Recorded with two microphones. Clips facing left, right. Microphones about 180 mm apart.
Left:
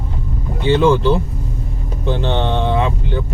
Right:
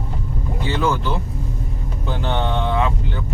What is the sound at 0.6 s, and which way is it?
Speech, 25° left (ahead or behind).